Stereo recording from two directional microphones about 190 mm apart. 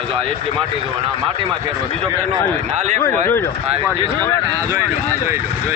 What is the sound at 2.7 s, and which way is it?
Speech, 40° right (ahead or behind).